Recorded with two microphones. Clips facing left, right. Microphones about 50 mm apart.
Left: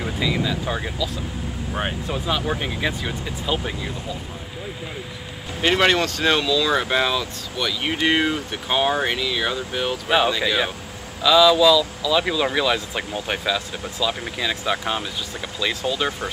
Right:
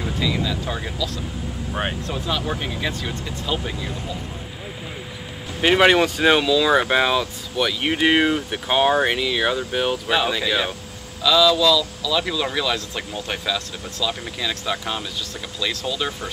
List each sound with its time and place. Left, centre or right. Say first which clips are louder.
0.0 s speech: even; centre
1.7 s speech: right 1 dB; centre
2.0 s speech: left 1 dB; centre
5.6 s speech: right 3 dB; centre
10.0 s speech: left 2 dB; centre